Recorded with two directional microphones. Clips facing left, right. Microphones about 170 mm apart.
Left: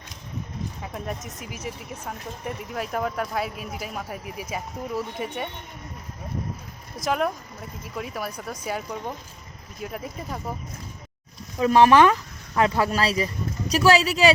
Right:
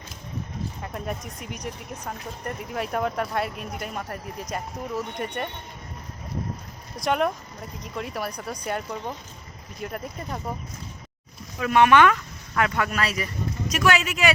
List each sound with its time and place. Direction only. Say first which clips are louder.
0.8 s speech: right 1 dB; centre (ahead or behind)
6.9 s speech: right 1 dB; centre (ahead or behind)
11.6 s speech: left 2 dB; 30° left (ahead or behind)